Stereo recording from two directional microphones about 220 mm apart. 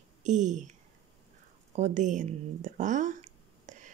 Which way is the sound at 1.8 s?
35° right (ahead or behind).